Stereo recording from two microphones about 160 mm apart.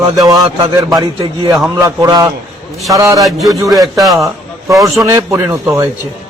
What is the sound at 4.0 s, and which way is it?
Speech, centre (ahead or behind).